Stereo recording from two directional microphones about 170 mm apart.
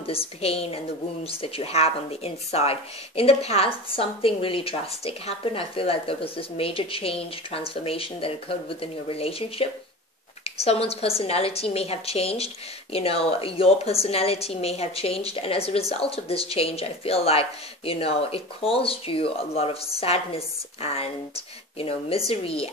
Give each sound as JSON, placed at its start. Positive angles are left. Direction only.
{"t": 0.0, "sound": "a woman's voice", "side_deg": 35}